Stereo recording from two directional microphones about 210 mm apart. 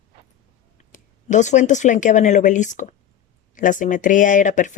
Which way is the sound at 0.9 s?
35° left (ahead or behind).